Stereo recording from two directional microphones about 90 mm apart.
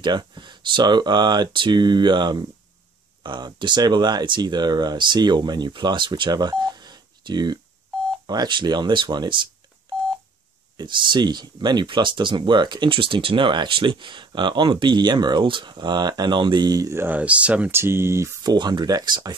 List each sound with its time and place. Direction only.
0.0 s speech: 55° right (ahead or behind)
10.8 s speech: 60° right (ahead or behind); by 16.9 s 45° right (ahead or behind)
16.9 s speech: 20° right (ahead or behind)
17.6 s speech: 25° right (ahead or behind)
18.4 s speech: 50° right (ahead or behind)